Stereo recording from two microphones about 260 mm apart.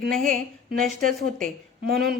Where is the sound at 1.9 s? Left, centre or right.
Right.